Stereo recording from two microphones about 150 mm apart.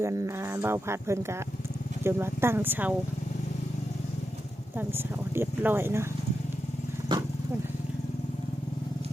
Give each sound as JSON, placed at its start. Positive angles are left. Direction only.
{"t": 0.0, "sound": "speech", "side_deg": -20}
{"t": 4.8, "sound": "speech", "side_deg": -15}